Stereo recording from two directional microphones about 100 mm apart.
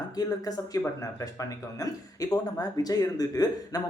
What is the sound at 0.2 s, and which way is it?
A man's voice, 40° left (ahead or behind).